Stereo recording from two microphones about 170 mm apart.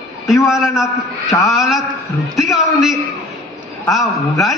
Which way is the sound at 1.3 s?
20° left (ahead or behind).